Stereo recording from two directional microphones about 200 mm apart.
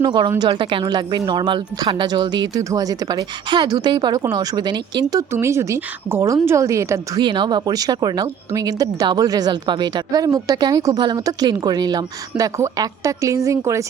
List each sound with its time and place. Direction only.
0.0 s speech: 20° right (ahead or behind)